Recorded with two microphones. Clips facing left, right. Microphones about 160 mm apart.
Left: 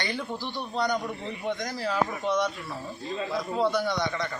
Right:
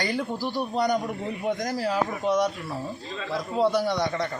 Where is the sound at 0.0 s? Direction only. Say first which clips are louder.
Right 5 dB; 40° right (ahead or behind).